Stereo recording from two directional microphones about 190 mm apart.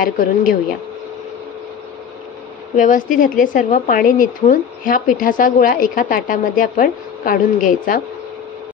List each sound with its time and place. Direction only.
0.0 s a woman's voice: 45° left (ahead or behind)
2.7 s a woman's voice: 45° left (ahead or behind)